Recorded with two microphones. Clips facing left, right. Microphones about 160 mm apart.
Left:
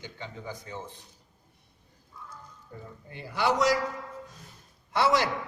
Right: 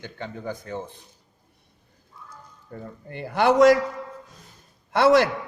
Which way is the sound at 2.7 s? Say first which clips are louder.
Right 8 dB; 60° right (ahead or behind).